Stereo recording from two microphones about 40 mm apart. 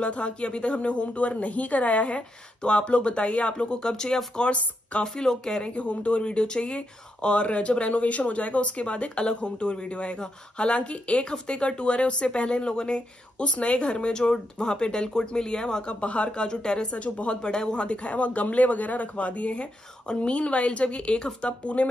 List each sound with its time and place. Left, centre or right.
0.0 s speech: left
4.4 s speech: left
5.0 s speech: centre
5.7 s speech: left
10.1 s speech: centre
10.8 s speech: left